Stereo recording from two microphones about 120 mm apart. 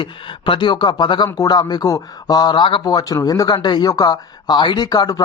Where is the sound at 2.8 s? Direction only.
30° left (ahead or behind).